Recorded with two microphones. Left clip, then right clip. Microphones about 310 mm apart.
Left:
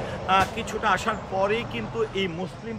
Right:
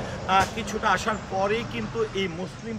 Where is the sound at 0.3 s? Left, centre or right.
Centre.